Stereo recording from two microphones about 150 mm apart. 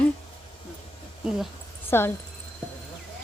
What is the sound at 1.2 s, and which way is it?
Speech, 5° right (ahead or behind).